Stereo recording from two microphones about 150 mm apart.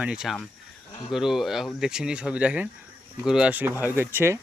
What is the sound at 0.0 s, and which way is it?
Speech, 5° right (ahead or behind).